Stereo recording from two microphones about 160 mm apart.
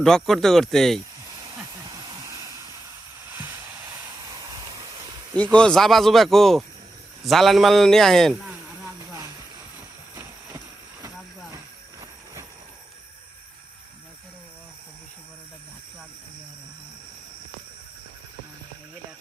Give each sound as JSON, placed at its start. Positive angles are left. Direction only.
{"t": 0.0, "sound": "speech", "side_deg": 0}
{"t": 1.4, "sound": "hair dryer", "side_deg": -20}
{"t": 3.3, "sound": "vehicle", "side_deg": -15}
{"t": 4.3, "sound": "a sound", "side_deg": -25}
{"t": 5.4, "sound": "speech", "side_deg": 5}
{"t": 9.0, "sound": "a sound", "side_deg": -20}
{"t": 11.5, "sound": "train", "side_deg": -20}